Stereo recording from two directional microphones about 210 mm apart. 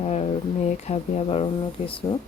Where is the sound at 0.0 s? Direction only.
30° left (ahead or behind).